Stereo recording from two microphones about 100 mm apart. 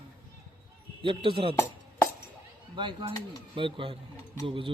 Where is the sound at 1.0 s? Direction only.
60° right (ahead or behind).